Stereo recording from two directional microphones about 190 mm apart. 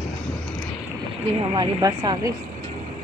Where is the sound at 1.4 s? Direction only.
25° right (ahead or behind).